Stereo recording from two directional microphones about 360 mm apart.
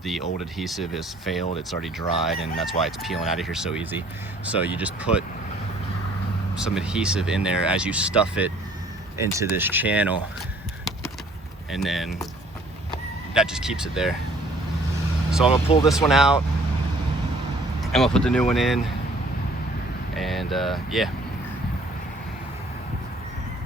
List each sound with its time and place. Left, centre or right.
0.5 s speech: centre
6.6 s speech: centre
11.7 s speech: centre
13.3 s speech: centre
15.4 s speech: centre
15.9 s speech: centre
17.9 s speech: centre
20.1 s speech: centre